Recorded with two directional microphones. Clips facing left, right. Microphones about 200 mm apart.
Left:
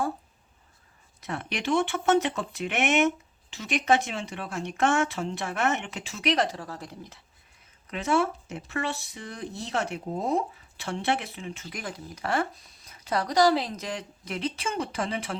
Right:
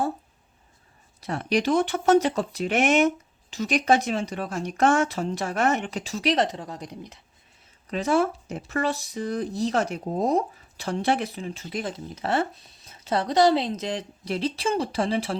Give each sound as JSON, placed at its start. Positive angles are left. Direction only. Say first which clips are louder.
{"t": 1.2, "sound": "speech", "louder": "right 8 dB", "side_deg": -35}
{"t": 7.9, "sound": "speech", "louder": "right 3 dB", "side_deg": -35}